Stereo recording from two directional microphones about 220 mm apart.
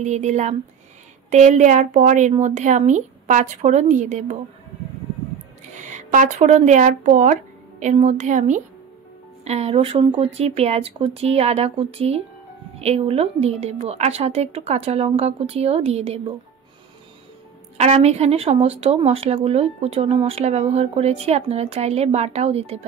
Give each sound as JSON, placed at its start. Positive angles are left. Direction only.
{"t": 0.0, "sound": "a woman's voice", "side_deg": -30}
{"t": 5.8, "sound": "a woman's voice", "side_deg": -35}
{"t": 17.7, "sound": "speech", "side_deg": -30}